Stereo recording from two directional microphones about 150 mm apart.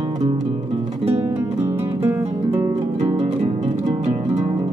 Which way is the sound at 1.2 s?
15° right (ahead or behind).